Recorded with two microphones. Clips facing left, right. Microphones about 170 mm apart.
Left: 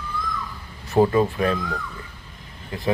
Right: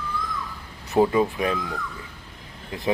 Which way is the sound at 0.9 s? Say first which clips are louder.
Left 1 dB; 5° right (ahead or behind).